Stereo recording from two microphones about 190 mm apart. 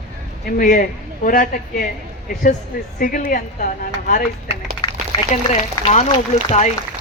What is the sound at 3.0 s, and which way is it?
Speech, 45° left (ahead or behind).